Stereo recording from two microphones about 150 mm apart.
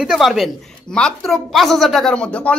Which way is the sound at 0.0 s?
Centre (ahead or behind).